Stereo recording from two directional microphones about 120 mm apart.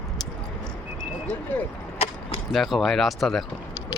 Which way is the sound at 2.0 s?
50° left (ahead or behind).